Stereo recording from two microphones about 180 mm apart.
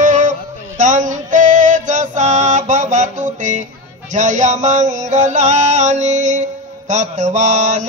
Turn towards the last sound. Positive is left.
turn(degrees=-40)  # may be behind; listen again after turning